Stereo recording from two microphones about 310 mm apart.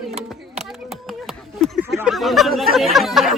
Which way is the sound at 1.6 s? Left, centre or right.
Centre.